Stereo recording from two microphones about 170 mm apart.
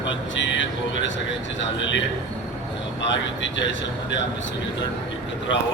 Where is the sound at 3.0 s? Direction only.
90° left.